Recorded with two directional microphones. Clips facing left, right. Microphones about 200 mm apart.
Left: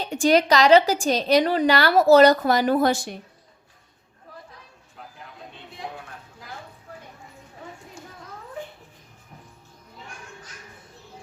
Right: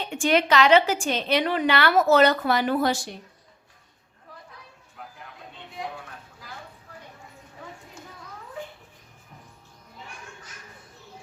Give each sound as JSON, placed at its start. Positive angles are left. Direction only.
{"t": 0.0, "sound": "a woman's voice", "side_deg": 40}